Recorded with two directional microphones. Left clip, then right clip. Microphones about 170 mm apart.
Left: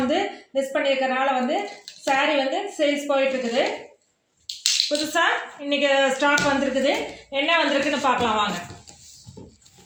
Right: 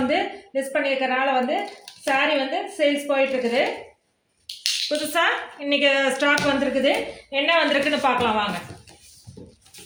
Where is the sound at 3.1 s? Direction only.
40° right (ahead or behind).